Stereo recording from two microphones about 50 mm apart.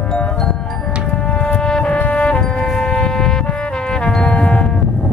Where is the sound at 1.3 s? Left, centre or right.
Left.